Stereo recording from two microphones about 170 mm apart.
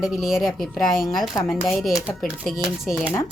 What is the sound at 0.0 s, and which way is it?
A woman's voice, centre (ahead or behind).